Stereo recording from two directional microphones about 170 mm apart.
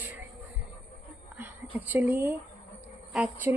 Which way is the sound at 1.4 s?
10° right (ahead or behind).